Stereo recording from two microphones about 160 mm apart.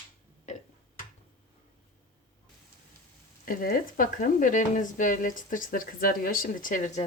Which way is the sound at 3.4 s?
65° left (ahead or behind).